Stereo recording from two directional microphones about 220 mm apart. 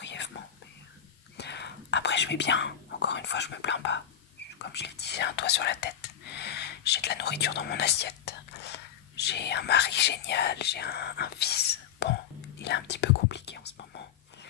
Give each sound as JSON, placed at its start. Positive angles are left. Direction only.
{"t": 0.0, "sound": "whispering", "side_deg": 55}
{"t": 1.3, "sound": "whispering", "side_deg": 50}
{"t": 4.6, "sound": "speech", "side_deg": 50}
{"t": 12.6, "sound": "whispering", "side_deg": 50}